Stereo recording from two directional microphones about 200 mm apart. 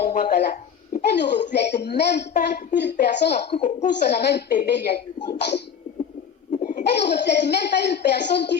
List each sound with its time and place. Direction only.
0.0 s a sound: 40° left (ahead or behind)
1.1 s a woman's voice: 60° left (ahead or behind)
3.5 s speech: 35° left (ahead or behind)
4.1 s a woman's voice: 55° left (ahead or behind)
6.5 s laughter: 35° left (ahead or behind)
6.8 s a woman's voice: 55° left (ahead or behind)